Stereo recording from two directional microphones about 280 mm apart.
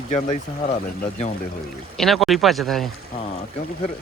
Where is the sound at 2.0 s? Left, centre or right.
Centre.